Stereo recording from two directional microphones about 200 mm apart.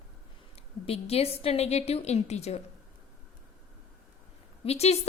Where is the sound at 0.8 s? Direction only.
30° left (ahead or behind).